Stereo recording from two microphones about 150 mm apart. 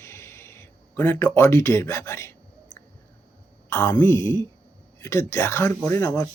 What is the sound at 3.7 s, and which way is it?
A woman's voice, 15° left (ahead or behind).